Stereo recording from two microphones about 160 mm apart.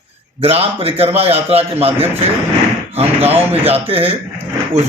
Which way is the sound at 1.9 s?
15° right (ahead or behind).